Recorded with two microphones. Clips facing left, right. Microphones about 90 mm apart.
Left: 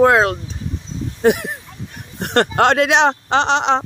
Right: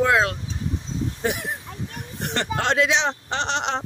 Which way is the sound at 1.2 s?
65° left (ahead or behind).